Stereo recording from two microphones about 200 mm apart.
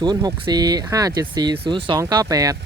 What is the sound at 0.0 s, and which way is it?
Speech, 20° right (ahead or behind).